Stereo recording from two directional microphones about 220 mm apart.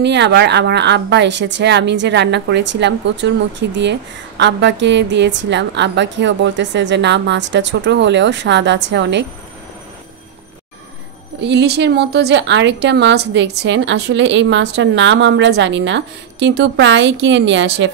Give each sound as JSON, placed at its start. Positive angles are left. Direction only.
{"t": 0.0, "sound": "a woman's voice", "side_deg": -50}
{"t": 11.4, "sound": "a woman's voice", "side_deg": -50}